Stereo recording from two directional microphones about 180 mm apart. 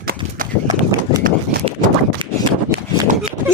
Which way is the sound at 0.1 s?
50° right (ahead or behind).